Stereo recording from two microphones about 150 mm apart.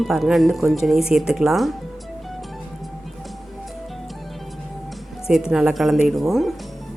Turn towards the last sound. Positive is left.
turn(degrees=0)  # may be behind; listen again after turning